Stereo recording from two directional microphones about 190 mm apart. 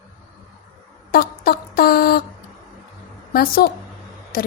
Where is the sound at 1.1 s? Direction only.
50° left (ahead or behind).